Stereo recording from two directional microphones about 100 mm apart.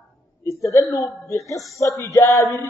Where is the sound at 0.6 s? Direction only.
30° left (ahead or behind).